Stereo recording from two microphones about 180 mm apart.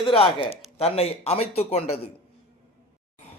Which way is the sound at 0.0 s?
30° left (ahead or behind).